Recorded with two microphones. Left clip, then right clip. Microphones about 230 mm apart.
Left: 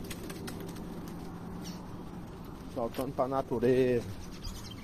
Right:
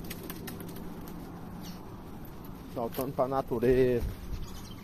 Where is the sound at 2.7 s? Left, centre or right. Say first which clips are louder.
Right 1 dB; right.